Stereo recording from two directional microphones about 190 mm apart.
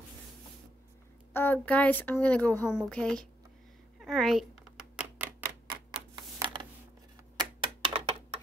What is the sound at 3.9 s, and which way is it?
Typewriter, centre (ahead or behind).